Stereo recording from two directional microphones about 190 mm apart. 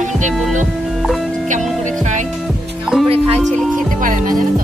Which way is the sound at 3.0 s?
30° right (ahead or behind).